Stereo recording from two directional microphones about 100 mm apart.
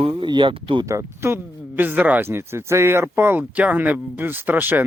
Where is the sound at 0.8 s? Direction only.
30° right (ahead or behind).